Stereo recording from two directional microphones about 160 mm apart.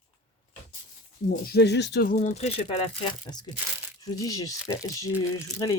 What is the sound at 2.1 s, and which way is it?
Speech, 45° left (ahead or behind).